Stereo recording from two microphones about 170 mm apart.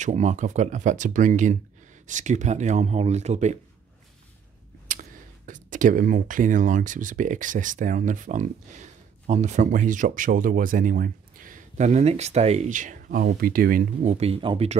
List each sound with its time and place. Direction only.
0.0 s speech: 45° right (ahead or behind)
4.9 s a sound: 50° right (ahead or behind)
5.5 s speech: 50° right (ahead or behind)
14.1 s speech: 35° right (ahead or behind)